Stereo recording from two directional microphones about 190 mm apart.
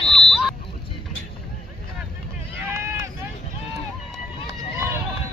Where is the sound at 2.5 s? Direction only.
15° right (ahead or behind).